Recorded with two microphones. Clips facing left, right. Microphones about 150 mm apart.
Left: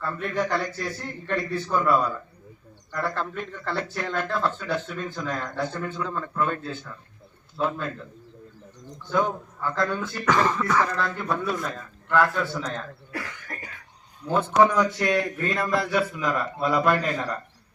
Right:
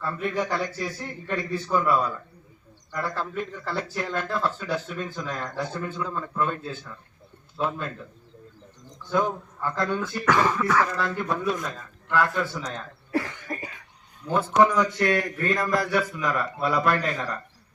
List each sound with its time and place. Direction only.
0.0 s speech: centre (ahead or behind)
9.1 s speech: 5° right (ahead or behind)
13.1 s cough: 25° right (ahead or behind)
14.8 s speech: 5° left (ahead or behind)
16.1 s a man's voice: 15° left (ahead or behind)